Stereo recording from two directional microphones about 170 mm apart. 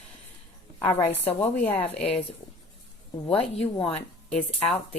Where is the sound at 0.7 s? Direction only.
10° left (ahead or behind).